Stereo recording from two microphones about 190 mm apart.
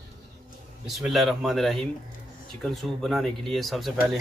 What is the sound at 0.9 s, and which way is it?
Speech, centre (ahead or behind).